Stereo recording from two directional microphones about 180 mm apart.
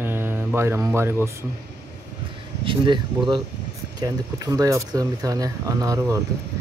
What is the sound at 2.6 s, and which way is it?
Speech, 25° right (ahead or behind).